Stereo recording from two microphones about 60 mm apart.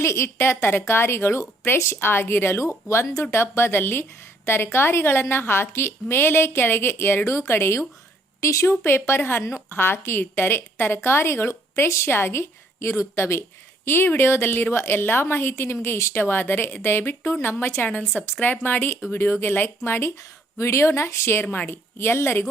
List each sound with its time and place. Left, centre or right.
0.0 s a woman's voice: left
7.3 s a woman's voice: left
8.4 s speech: left
8.8 s a woman's voice: left
9.4 s a woman's voice: left
16.2 s a woman's voice: left
17.8 s a woman's voice: left
20.6 s a woman's voice: left